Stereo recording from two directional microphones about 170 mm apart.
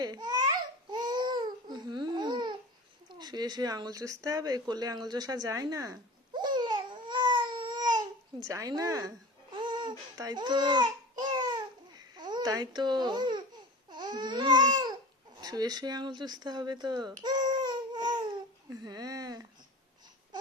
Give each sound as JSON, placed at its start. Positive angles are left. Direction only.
{"t": 0.0, "sound": "a child's voice", "side_deg": -25}
{"t": 0.9, "sound": "babbling", "side_deg": -25}
{"t": 3.1, "sound": "a sound", "side_deg": -25}
{"t": 9.6, "sound": "speech", "side_deg": -25}
{"t": 11.2, "sound": "babbling", "side_deg": -25}
{"t": 15.4, "sound": "speech", "side_deg": -20}
{"t": 18.7, "sound": "a sound", "side_deg": -20}